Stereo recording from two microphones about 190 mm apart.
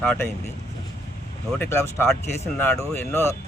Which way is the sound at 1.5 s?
15° left (ahead or behind).